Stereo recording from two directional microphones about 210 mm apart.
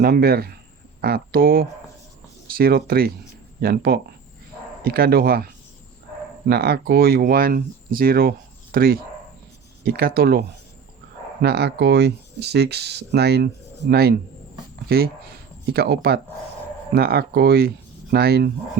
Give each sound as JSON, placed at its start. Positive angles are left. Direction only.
{"t": 0.0, "sound": "speech", "side_deg": -45}
{"t": 6.5, "sound": "speech", "side_deg": -50}
{"t": 11.4, "sound": "speech", "side_deg": -50}